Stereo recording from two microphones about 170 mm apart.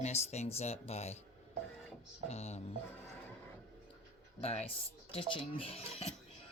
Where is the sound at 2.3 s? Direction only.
40° left (ahead or behind).